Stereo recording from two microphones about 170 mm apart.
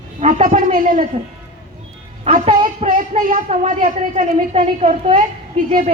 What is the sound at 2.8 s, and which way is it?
Speech, 55° right (ahead or behind).